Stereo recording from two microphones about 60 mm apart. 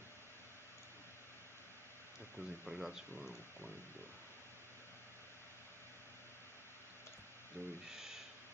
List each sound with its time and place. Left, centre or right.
2.3 s speech: centre
7.6 s speech: right
7.9 s a sound: centre